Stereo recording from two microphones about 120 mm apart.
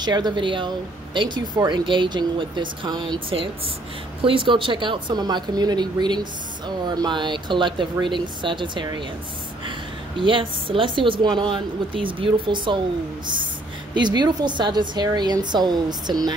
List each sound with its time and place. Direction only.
0.0 s a woman's voice: 35° right (ahead or behind)
13.9 s speech: 40° right (ahead or behind)